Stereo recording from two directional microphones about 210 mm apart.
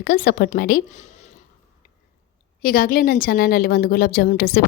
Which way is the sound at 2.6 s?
45° left (ahead or behind).